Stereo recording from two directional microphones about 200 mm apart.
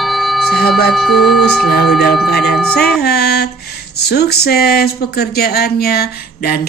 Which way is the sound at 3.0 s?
55° left (ahead or behind).